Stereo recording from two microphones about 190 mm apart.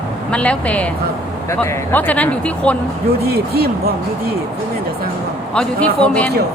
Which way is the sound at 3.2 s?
55° right (ahead or behind).